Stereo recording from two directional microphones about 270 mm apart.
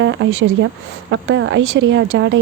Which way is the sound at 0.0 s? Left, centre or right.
Right.